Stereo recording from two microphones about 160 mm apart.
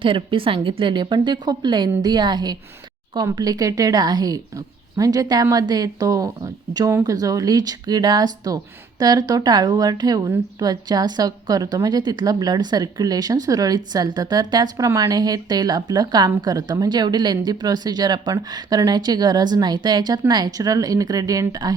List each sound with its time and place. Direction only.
0.0 s a woman's voice: 35° right (ahead or behind)